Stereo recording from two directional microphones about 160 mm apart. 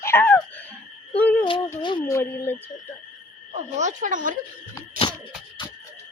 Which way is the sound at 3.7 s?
50° right (ahead or behind).